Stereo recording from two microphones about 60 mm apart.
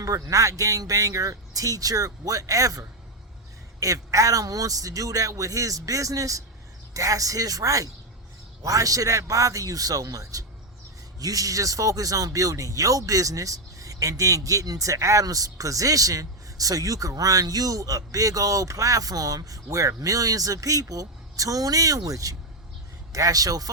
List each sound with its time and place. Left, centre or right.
0.0 s a man's voice: right